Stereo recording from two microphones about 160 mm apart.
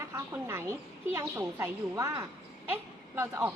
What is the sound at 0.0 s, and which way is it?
A woman's voice, 15° right (ahead or behind).